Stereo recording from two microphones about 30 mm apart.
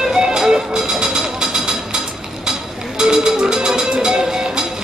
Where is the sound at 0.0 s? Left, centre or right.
Right.